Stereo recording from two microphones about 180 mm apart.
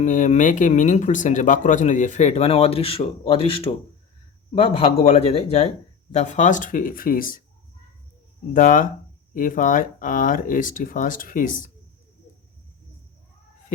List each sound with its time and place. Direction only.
0.0 s speech: 45° left (ahead or behind)
8.5 s speech: 45° left (ahead or behind)